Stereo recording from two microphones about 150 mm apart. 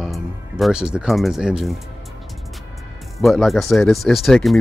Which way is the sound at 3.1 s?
Centre (ahead or behind).